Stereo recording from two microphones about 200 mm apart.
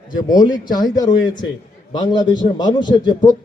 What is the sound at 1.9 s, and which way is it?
A man's voice, 20° left (ahead or behind).